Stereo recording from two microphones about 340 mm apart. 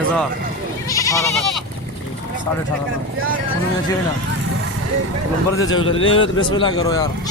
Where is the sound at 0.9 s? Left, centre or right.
Centre.